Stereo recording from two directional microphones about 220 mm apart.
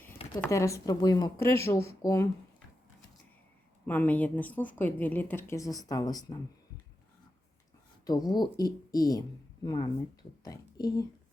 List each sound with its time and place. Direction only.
0.4 s a woman's voice: 15° left (ahead or behind)
3.8 s a woman's voice: 5° left (ahead or behind)
8.0 s a woman's voice: 15° left (ahead or behind)